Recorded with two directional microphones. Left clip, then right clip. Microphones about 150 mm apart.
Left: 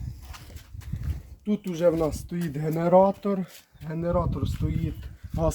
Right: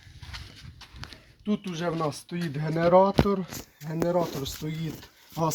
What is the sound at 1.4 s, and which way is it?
Speech, 20° right (ahead or behind).